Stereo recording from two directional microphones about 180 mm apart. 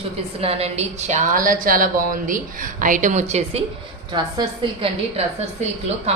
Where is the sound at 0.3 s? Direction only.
35° right (ahead or behind).